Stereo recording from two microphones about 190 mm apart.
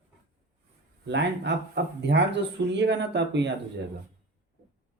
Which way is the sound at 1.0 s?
65° right (ahead or behind).